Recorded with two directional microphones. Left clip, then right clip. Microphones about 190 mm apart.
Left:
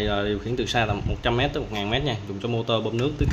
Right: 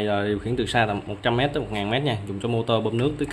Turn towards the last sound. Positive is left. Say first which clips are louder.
# right 2 dB
turn(degrees=-15)  # may be behind; listen again after turning